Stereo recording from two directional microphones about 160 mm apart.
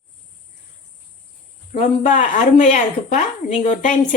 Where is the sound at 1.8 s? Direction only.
50° left (ahead or behind).